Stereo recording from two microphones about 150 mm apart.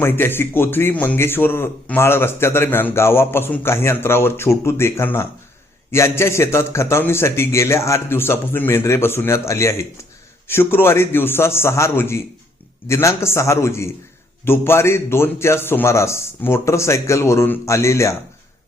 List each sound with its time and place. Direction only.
0.0 s a man's voice: 15° left (ahead or behind)